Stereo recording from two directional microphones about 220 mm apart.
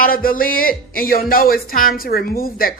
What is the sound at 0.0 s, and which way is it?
A woman's voice, 40° left (ahead or behind).